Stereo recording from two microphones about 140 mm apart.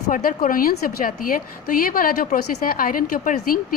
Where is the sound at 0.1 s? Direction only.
75° left (ahead or behind).